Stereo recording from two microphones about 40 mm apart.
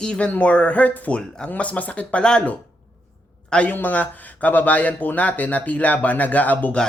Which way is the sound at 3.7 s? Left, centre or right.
Left.